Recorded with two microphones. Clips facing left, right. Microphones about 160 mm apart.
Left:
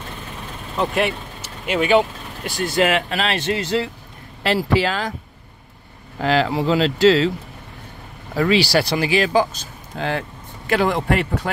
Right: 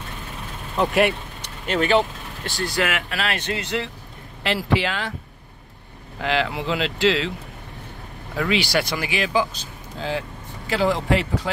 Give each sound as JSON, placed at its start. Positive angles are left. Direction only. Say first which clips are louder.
{"t": 0.7, "sound": "speech", "louder": "right 1 dB", "side_deg": 0}
{"t": 1.7, "sound": "speech", "louder": "left 3 dB", "side_deg": 10}
{"t": 6.2, "sound": "speech", "louder": "left 5 dB", "side_deg": 40}
{"t": 8.4, "sound": "speech", "louder": "left 5 dB", "side_deg": 35}
{"t": 9.9, "sound": "speech", "louder": "left 3 dB", "side_deg": 65}